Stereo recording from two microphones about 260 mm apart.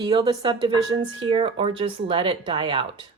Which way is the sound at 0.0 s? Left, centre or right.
Centre.